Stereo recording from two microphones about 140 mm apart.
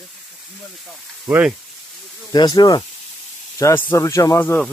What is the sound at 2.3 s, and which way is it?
Speech, 30° left (ahead or behind).